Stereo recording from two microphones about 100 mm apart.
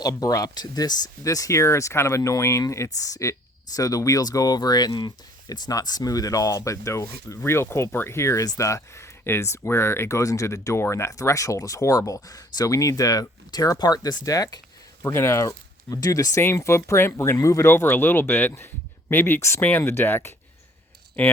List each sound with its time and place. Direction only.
0.0 s speech: 40° left (ahead or behind); by 21.3 s 15° left (ahead or behind)